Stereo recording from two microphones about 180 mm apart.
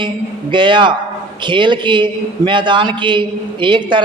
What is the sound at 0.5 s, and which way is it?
A man's voice, 25° right (ahead or behind).